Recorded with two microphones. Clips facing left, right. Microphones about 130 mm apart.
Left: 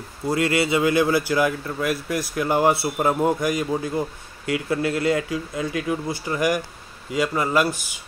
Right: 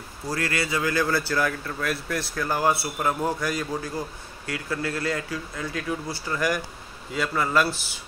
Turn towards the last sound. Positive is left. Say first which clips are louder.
# left 3 dB
turn(degrees=10)  # may be behind; listen again after turning